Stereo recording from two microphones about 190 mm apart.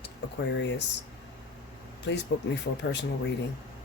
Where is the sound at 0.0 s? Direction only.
70° left (ahead or behind).